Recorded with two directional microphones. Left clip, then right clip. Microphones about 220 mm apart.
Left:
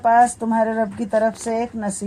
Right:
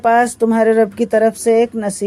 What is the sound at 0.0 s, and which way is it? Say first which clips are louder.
Speech: right 2 dB; 40° right (ahead or behind).